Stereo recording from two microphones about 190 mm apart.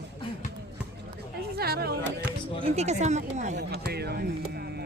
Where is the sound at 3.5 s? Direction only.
55° right (ahead or behind).